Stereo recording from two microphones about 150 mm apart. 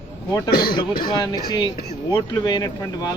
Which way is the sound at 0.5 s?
90° left.